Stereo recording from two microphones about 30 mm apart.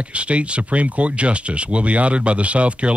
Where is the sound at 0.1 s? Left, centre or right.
Right.